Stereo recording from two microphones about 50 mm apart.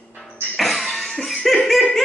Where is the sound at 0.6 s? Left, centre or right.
Centre.